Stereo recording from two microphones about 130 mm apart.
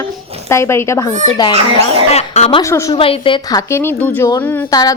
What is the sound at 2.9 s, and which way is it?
Speech, 45° left (ahead or behind).